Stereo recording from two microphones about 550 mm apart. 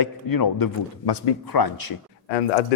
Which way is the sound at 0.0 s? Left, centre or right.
Left.